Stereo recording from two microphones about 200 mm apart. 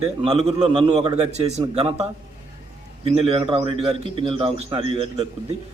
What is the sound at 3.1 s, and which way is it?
Speech, 30° right (ahead or behind).